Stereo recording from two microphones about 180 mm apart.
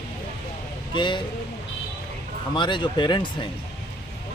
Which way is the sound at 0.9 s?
25° left (ahead or behind).